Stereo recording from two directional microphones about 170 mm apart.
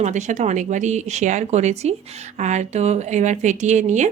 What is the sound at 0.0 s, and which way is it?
A woman's voice, 45° right (ahead or behind).